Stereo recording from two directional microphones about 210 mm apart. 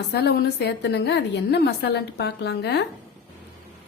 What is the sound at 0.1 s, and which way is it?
Speech, 50° left (ahead or behind).